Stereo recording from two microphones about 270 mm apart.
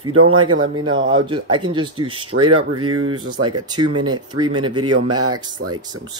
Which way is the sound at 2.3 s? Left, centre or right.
Right.